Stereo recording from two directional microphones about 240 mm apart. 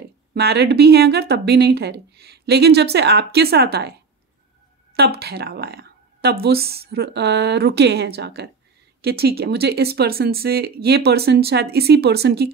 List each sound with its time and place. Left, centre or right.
0.3 s speech: right
4.9 s speech: right